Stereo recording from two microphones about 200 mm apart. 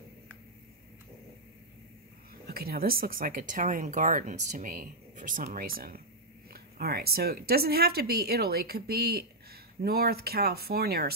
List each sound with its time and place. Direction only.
2.4 s speech: 50° right (ahead or behind)